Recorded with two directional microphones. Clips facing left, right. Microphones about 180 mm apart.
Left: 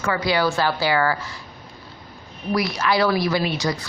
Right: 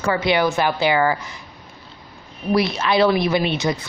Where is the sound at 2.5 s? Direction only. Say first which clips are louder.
Right 3 dB; 25° right (ahead or behind).